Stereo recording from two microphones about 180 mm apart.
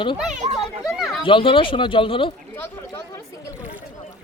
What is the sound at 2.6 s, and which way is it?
Chatter, 15° left (ahead or behind).